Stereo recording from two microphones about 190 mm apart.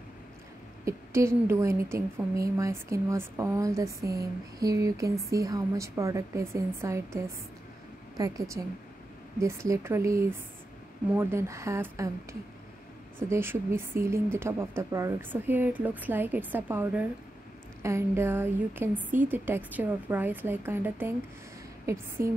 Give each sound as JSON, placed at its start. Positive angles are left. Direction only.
{"t": 0.8, "sound": "a woman's voice", "side_deg": -15}
{"t": 8.2, "sound": "a woman's voice", "side_deg": -15}